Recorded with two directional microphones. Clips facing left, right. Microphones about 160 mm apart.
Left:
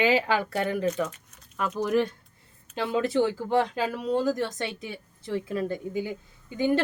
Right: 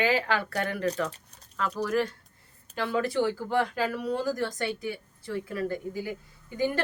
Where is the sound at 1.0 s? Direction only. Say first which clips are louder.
Right 2 dB; 30° right (ahead or behind).